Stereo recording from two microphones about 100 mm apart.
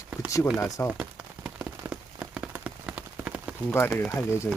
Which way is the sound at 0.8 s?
25° left (ahead or behind).